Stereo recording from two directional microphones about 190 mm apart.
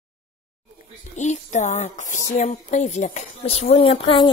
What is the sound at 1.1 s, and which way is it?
Speech, 40° left (ahead or behind).